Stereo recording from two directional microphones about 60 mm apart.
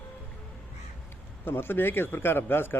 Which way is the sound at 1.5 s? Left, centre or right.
Left.